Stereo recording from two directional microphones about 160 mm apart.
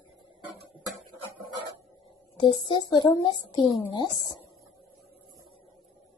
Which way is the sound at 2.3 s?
30° left (ahead or behind).